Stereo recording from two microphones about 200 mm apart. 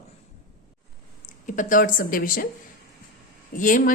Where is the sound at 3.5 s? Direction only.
40° left (ahead or behind).